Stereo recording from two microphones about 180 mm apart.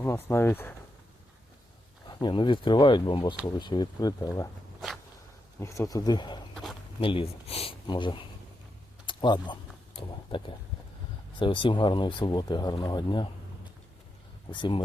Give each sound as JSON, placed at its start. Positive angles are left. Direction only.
{"t": 0.0, "sound": "speech", "side_deg": 15}
{"t": 2.0, "sound": "speech", "side_deg": 25}
{"t": 5.5, "sound": "speech", "side_deg": 15}
{"t": 11.3, "sound": "speech", "side_deg": 30}
{"t": 14.5, "sound": "speech", "side_deg": 25}